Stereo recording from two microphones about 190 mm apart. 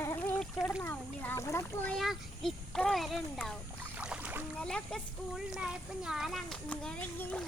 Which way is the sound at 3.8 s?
5° right (ahead or behind).